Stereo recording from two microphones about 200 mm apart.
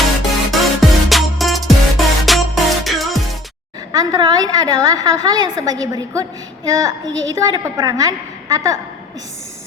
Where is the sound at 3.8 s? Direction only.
20° right (ahead or behind).